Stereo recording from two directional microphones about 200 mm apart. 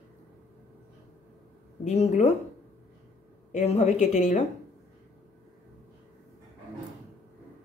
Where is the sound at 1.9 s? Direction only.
35° left (ahead or behind).